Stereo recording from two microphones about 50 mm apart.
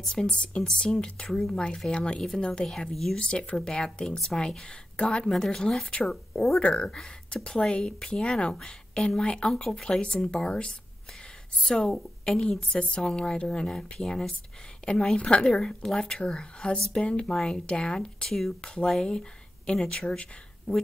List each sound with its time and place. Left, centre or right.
0.0 s a woman's voice: centre
2.9 s speech: centre
3.2 s a woman's voice: centre
5.9 s a woman's voice: left
9.5 s a woman's voice: centre
14.8 s a sound: left
15.1 s a woman's voice: left
17.3 s a woman's voice: centre